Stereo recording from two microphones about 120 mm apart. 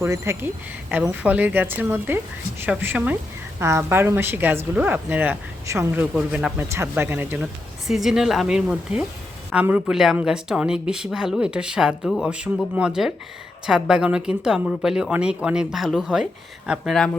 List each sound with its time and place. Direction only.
0.0 s a woman's voice: 20° right (ahead or behind)
7.9 s a woman's voice: centre (ahead or behind)